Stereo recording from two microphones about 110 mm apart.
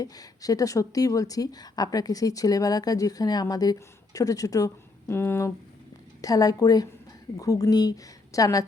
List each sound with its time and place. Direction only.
0.0 s a woman's voice: 35° left (ahead or behind)
6.2 s a woman's voice: 35° left (ahead or behind)